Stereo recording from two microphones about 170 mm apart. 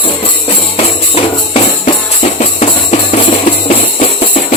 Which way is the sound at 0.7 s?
35° left (ahead or behind).